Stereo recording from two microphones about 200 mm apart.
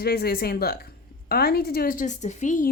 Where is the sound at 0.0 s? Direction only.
50° left (ahead or behind).